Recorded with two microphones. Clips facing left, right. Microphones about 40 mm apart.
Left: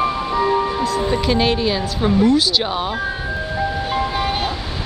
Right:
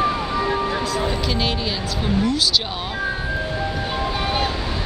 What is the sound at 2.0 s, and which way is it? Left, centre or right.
Speech, left.